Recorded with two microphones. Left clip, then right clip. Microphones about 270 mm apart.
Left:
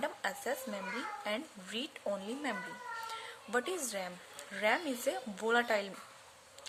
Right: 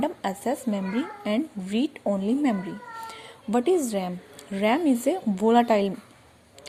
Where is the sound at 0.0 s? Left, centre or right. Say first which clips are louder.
Right 9 dB; centre.